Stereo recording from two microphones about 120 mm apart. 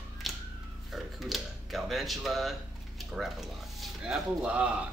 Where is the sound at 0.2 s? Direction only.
Centre (ahead or behind).